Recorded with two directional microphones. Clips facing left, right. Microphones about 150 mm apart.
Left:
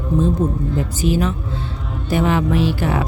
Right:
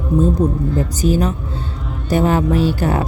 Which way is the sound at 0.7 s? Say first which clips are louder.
Right 2 dB; 40° right (ahead or behind).